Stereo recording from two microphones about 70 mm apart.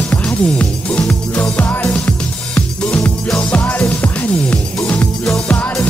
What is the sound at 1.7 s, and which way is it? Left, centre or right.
Music, left.